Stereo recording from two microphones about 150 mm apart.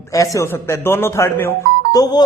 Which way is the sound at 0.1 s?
20° left (ahead or behind).